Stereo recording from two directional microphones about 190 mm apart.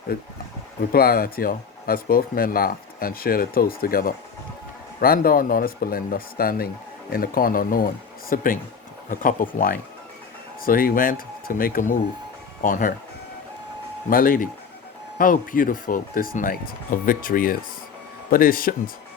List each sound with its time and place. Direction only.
0.1 s speech: 55° left (ahead or behind)
14.1 s speech: 50° left (ahead or behind)